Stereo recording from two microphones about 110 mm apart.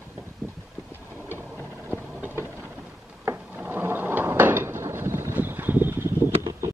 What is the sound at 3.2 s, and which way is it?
Drawer open or close, 20° right (ahead or behind).